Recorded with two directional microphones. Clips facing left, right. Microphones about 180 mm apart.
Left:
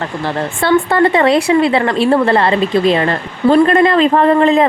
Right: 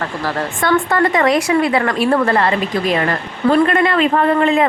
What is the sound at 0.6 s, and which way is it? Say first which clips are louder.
A woman's voice: left 4 dB; 30° left (ahead or behind).